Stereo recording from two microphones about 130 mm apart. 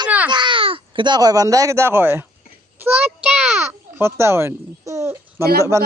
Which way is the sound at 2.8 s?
10° right (ahead or behind).